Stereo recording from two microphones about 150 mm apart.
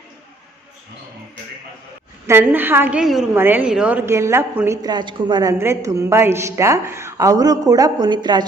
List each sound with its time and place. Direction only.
2.2 s a woman's voice: 15° right (ahead or behind)
3.3 s a woman's voice: 15° right (ahead or behind); by 8.4 s 30° right (ahead or behind)